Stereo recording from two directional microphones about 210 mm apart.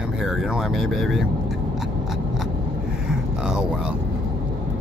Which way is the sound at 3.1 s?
5° right (ahead or behind).